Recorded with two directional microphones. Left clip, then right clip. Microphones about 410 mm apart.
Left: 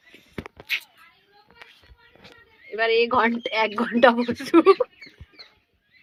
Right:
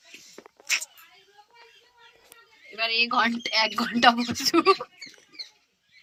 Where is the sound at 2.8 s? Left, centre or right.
Centre.